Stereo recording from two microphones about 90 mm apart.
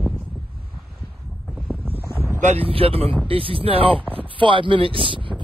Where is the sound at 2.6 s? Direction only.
90° right.